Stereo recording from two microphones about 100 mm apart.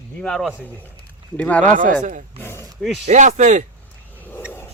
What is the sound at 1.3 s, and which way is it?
Speech, 15° left (ahead or behind).